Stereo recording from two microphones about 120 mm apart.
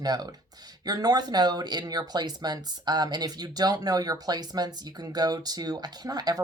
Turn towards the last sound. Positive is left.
turn(degrees=-35)  # may be behind; listen again after turning